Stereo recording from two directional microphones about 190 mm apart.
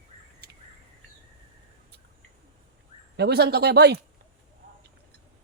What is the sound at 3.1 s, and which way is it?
Speech, 60° right (ahead or behind).